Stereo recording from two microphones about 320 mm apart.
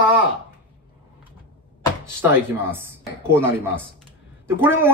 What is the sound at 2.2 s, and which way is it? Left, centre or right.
Speech, centre.